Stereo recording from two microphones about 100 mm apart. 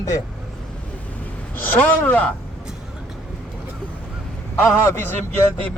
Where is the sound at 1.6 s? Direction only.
20° left (ahead or behind).